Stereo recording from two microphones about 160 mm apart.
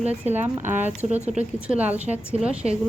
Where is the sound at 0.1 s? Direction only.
10° right (ahead or behind).